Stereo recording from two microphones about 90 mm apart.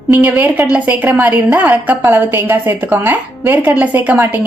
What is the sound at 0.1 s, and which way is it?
A woman's voice, 15° right (ahead or behind).